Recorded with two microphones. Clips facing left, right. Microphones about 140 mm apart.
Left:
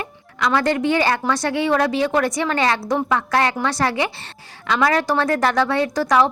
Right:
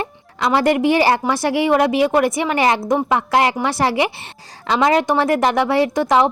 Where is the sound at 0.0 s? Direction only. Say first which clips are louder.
Right 2 dB; 25° right (ahead or behind).